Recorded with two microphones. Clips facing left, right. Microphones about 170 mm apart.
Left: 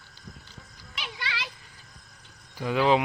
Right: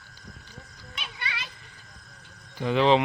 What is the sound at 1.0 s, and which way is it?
Children playing, 90° left.